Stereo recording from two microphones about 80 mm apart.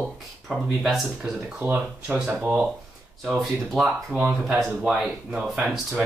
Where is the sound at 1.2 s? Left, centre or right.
Centre.